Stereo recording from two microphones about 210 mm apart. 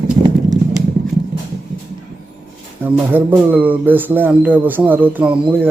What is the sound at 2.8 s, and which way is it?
Speech, 10° right (ahead or behind).